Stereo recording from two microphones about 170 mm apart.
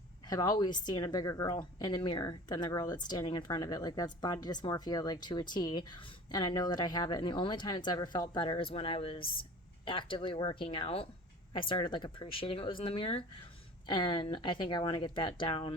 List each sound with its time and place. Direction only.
0.3 s a woman's voice: 25° left (ahead or behind)